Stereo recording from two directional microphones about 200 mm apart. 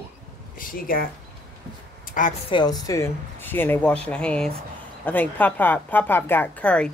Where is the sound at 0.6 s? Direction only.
45° left (ahead or behind).